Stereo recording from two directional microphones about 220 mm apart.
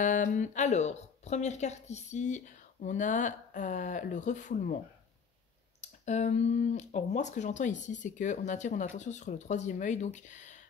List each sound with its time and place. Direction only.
0.0 s speech: 35° left (ahead or behind)
5.8 s speech: 30° left (ahead or behind)